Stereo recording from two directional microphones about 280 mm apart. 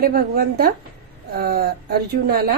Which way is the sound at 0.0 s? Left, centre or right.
Right.